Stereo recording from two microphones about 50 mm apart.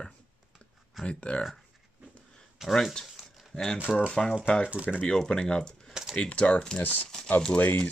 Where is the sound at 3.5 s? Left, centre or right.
Centre.